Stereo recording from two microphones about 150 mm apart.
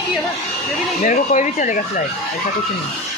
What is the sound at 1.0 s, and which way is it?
Speech, 55° left (ahead or behind).